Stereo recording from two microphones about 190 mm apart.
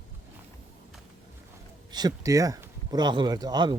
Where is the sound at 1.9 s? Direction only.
20° right (ahead or behind).